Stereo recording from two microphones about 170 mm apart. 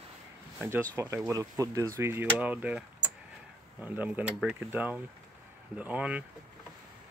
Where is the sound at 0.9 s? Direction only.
15° right (ahead or behind).